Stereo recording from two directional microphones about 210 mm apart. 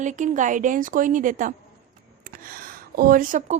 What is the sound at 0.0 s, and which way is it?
Speech, 35° right (ahead or behind).